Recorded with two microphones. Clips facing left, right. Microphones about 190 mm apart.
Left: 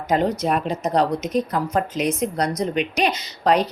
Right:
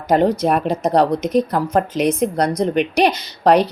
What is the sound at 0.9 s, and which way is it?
Speech, 65° right (ahead or behind).